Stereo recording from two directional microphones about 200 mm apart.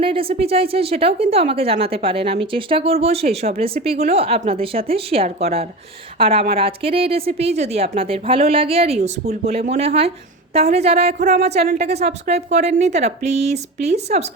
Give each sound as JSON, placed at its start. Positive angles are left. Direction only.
{"t": 0.0, "sound": "speech", "side_deg": -25}